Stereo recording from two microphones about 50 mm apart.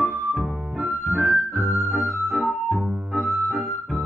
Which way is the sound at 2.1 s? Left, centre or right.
Right.